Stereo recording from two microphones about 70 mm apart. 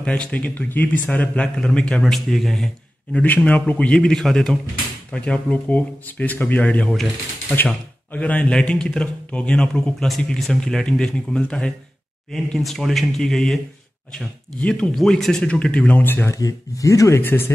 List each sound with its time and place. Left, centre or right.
0.0 s a man's voice: centre
3.3 s a man's voice: left
5.1 s a man's voice: centre
12.3 s speech: centre
14.6 s a man's voice: centre
15.4 s speech: centre
16.3 s speech: left
17.2 s speech: left